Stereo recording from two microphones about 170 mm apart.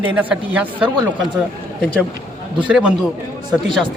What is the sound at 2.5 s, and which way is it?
Speech, 5° right (ahead or behind).